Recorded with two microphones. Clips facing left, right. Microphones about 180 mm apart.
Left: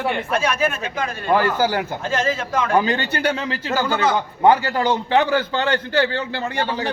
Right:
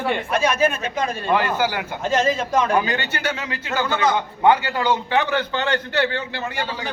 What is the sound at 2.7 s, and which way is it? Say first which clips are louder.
Speech: left 3 dB; 30° left (ahead or behind).